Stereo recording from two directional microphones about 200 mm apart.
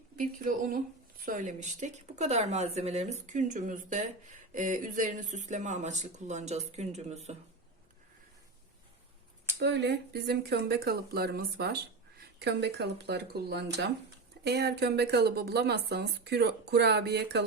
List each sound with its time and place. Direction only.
0.2 s speech: 40° right (ahead or behind)
9.6 s speech: 60° right (ahead or behind)